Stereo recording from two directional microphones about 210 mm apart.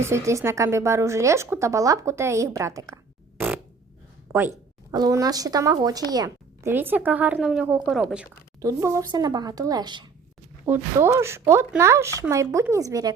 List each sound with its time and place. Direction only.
0.0 s speech: 15° right (ahead or behind)
8.6 s speech: 15° right (ahead or behind)